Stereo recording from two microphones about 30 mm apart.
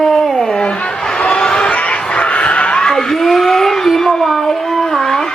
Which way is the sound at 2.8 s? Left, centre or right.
Centre.